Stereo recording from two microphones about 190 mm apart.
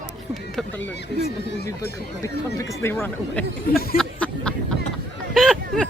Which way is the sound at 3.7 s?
50° left (ahead or behind).